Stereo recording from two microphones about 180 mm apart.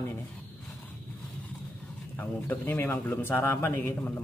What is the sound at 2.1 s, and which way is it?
Speech, 10° left (ahead or behind).